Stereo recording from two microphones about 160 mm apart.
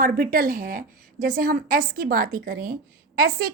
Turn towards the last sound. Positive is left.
turn(degrees=-60)  # may be behind; listen again after turning